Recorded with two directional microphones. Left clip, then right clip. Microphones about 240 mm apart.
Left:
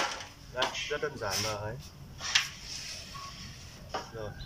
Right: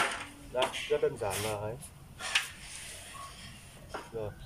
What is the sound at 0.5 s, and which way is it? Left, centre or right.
Speech, centre.